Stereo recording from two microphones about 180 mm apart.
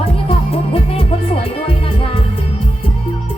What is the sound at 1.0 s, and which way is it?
Music, 30° left (ahead or behind).